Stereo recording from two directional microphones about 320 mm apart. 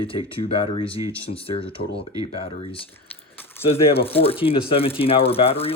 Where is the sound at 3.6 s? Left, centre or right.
Centre.